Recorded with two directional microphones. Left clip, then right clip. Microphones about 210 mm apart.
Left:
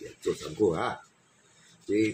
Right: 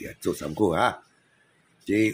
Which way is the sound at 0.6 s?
45° right (ahead or behind).